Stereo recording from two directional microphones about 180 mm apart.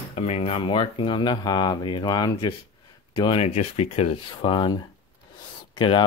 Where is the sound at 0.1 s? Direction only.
35° left (ahead or behind).